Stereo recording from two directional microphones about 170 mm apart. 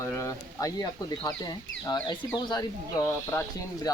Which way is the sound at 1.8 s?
25° left (ahead or behind).